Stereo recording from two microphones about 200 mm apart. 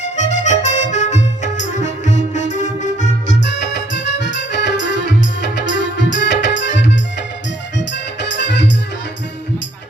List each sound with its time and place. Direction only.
0.0 s music: 35° left (ahead or behind)
3.4 s music: 60° left (ahead or behind)
8.4 s music: 60° left (ahead or behind)